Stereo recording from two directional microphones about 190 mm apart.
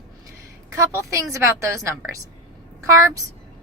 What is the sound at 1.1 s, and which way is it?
Speech, 15° right (ahead or behind).